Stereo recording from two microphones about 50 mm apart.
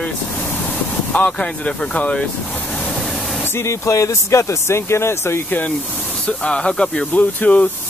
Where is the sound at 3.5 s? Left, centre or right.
Left.